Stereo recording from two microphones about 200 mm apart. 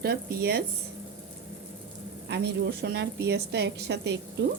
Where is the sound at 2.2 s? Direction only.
55° right (ahead or behind).